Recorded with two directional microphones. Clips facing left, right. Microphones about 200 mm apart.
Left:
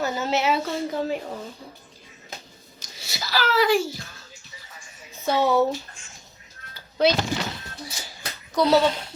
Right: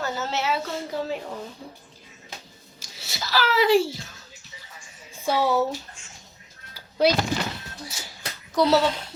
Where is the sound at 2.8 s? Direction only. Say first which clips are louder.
Even; centre (ahead or behind).